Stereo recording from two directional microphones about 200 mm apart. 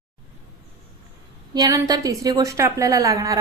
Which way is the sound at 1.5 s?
20° right (ahead or behind).